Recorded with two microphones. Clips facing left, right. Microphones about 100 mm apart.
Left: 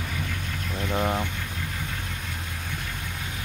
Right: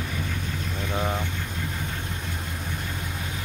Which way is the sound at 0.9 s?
10° left (ahead or behind).